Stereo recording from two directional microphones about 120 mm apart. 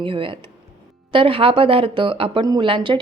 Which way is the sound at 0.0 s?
45° right (ahead or behind).